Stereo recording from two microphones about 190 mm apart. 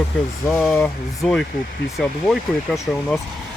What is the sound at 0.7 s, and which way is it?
Speech, 15° left (ahead or behind).